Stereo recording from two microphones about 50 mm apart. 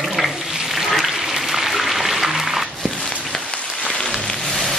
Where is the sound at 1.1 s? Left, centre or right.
Centre.